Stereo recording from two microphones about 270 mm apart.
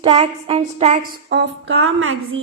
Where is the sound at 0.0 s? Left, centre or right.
Right.